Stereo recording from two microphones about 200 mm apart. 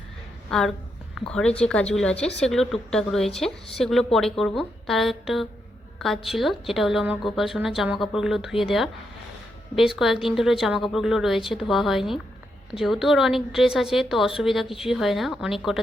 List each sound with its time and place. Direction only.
0.5 s a woman's voice: 5° left (ahead or behind)